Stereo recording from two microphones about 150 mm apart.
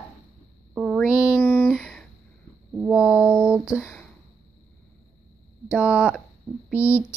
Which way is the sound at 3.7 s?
5° left (ahead or behind).